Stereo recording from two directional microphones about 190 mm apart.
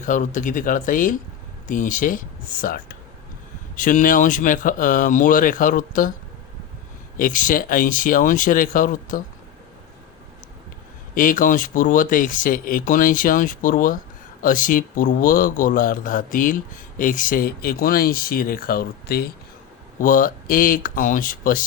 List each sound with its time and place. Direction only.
0.0 s speech: 40° left (ahead or behind)
7.2 s speech: 45° left (ahead or behind)
11.1 s speech: 45° left (ahead or behind)
20.0 s speech: 45° left (ahead or behind)